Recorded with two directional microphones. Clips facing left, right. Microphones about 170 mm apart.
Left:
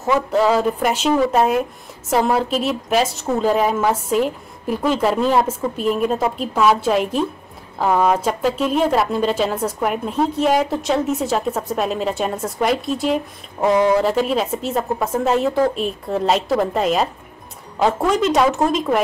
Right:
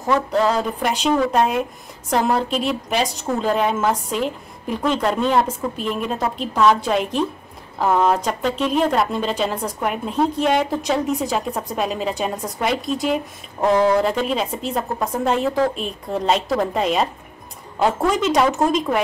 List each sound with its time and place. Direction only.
0.0 s speech: 5° left (ahead or behind)